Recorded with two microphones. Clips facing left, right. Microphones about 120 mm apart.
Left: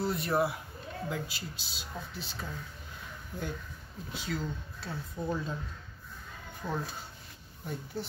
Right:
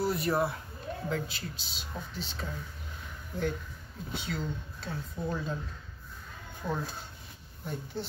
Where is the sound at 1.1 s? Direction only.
5° left (ahead or behind).